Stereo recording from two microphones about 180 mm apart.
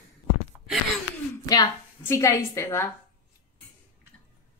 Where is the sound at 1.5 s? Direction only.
20° left (ahead or behind).